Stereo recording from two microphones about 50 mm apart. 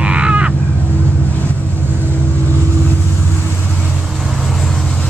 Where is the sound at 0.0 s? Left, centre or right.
Right.